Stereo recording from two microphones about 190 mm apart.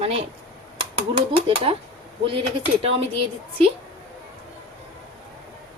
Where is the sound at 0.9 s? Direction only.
30° right (ahead or behind).